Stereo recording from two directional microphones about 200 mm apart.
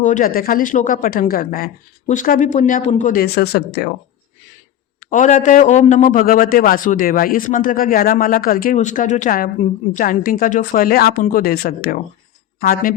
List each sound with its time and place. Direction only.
0.0 s a man's voice: 40° left (ahead or behind)
4.9 s a man's voice: 40° left (ahead or behind)